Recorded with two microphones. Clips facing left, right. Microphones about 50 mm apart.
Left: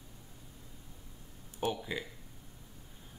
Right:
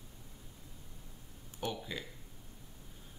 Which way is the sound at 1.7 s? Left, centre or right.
Centre.